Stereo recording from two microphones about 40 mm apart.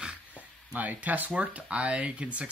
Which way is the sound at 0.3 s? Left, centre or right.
Right.